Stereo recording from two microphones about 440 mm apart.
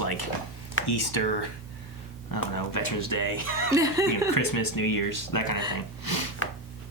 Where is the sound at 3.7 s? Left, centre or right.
Centre.